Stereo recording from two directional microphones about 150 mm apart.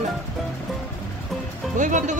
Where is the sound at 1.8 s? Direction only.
55° right (ahead or behind).